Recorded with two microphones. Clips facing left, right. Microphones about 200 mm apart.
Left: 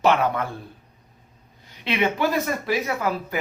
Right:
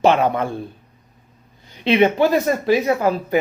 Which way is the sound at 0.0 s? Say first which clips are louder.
Right 4 dB; 25° right (ahead or behind).